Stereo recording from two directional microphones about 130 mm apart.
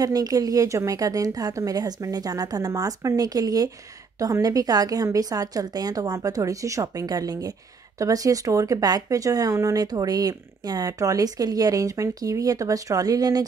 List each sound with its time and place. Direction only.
0.0 s speech: 30° right (ahead or behind)